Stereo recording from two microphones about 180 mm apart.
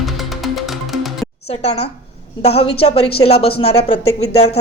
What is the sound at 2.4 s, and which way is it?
A woman's voice, 35° left (ahead or behind).